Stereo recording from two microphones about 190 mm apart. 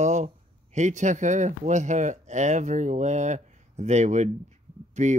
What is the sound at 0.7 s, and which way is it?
Speech, 40° right (ahead or behind).